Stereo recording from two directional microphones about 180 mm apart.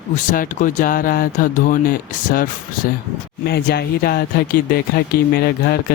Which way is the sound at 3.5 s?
65° left (ahead or behind).